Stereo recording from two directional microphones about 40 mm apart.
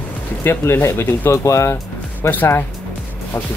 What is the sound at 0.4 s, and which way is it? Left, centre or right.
Speech, left.